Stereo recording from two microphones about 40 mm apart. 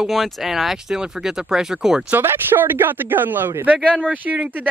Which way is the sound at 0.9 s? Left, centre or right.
Centre.